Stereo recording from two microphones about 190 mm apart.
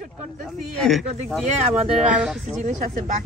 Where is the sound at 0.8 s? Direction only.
Centre (ahead or behind).